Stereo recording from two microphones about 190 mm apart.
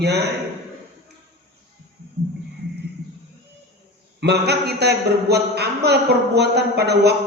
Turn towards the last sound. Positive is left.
turn(degrees=-60)  # may be behind; listen again after turning